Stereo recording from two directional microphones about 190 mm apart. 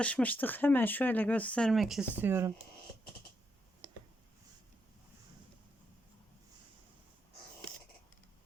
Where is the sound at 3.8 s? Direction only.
20° right (ahead or behind).